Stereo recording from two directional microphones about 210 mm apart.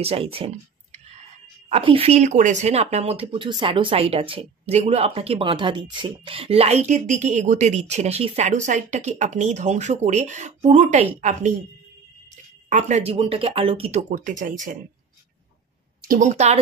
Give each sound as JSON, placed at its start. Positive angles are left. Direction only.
{"t": 0.0, "sound": "a woman's voice", "side_deg": -25}
{"t": 12.6, "sound": "a woman's voice", "side_deg": -35}
{"t": 16.0, "sound": "a woman's voice", "side_deg": -40}